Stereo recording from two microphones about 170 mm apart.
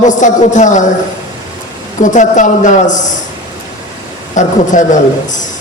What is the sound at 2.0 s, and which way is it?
Speech, 45° left (ahead or behind).